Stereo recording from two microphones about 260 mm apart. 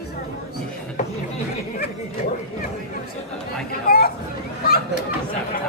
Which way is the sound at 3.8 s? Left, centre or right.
Left.